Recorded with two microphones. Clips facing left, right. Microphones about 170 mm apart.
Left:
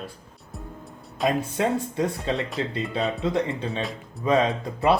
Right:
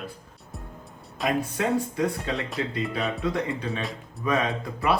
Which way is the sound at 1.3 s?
25° left (ahead or behind).